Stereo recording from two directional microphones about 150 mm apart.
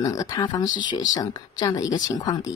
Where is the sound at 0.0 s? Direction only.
25° left (ahead or behind).